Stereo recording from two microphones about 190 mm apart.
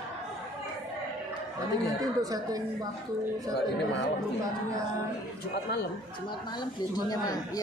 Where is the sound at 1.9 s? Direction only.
20° right (ahead or behind).